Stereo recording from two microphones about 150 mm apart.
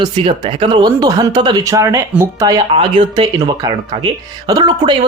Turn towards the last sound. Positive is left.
turn(degrees=-30)  # may be behind; listen again after turning